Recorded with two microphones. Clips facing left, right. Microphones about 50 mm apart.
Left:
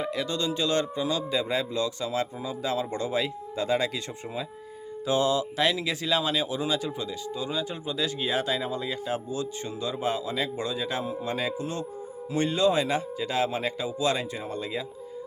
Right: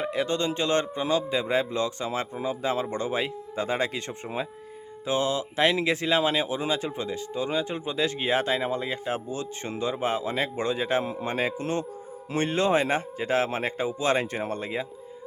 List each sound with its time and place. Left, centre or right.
0.0 s speech: right